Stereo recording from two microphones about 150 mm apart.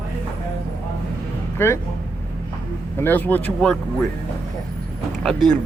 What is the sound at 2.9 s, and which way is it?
Speech, 15° left (ahead or behind).